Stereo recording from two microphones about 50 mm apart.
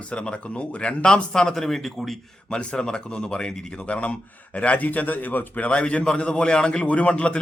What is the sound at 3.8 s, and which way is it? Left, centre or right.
Speech, left.